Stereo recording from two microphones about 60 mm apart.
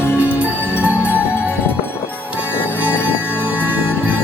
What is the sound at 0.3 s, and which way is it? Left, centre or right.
Music, right.